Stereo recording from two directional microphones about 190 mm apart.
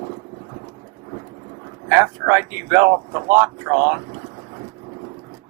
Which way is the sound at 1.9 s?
15° right (ahead or behind).